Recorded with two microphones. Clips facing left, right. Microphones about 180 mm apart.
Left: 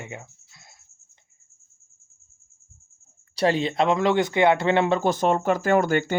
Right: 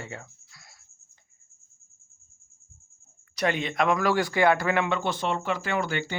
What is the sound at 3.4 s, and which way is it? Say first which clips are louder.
Speech: left 5 dB; 30° left (ahead or behind).